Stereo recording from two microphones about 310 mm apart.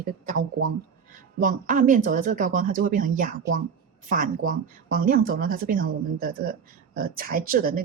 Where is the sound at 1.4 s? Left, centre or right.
Right.